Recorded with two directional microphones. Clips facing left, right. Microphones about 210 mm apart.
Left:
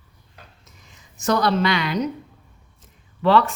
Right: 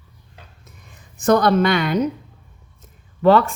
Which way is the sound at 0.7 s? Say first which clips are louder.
Right 4 dB; 55° right (ahead or behind).